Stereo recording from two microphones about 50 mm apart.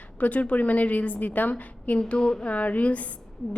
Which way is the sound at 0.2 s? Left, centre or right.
Left.